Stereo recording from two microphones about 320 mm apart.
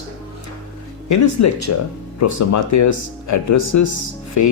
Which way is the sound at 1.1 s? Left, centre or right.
Left.